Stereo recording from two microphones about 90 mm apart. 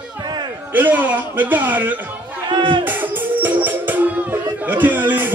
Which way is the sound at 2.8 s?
20° right (ahead or behind).